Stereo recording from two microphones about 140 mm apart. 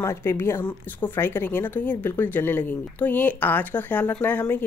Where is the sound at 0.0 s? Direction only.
20° left (ahead or behind).